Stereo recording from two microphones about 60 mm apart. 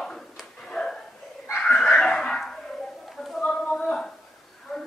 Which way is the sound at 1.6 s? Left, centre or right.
Centre.